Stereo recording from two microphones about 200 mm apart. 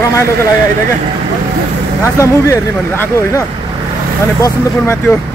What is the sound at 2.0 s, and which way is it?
Speech, 15° left (ahead or behind).